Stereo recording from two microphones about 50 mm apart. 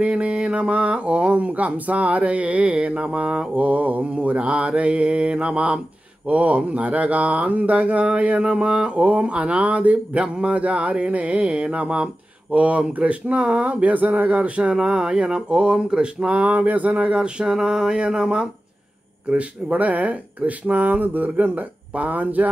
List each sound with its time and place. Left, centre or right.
0.0 s mantra: right
3.5 s mantra: right; by 18.0 s centre
18.0 s speech: centre
19.2 s speech: right